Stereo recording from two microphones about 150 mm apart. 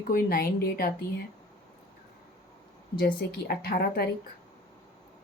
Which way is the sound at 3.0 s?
85° left.